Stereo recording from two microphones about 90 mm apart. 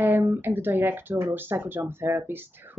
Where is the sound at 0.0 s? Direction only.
20° right (ahead or behind).